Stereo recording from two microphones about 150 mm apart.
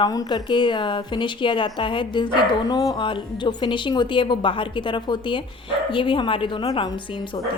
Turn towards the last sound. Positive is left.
turn(degrees=30)  # may be behind; listen again after turning